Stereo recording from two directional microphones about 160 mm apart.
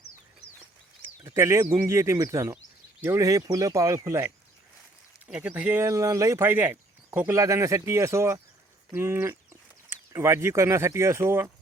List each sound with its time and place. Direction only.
1.2 s speech: 20° right (ahead or behind)
5.3 s speech: 10° right (ahead or behind)